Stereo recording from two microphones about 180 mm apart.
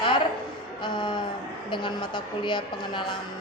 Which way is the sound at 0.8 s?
25° left (ahead or behind).